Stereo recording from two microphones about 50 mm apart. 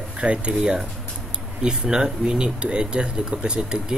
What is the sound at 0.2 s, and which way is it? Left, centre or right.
Speech, right.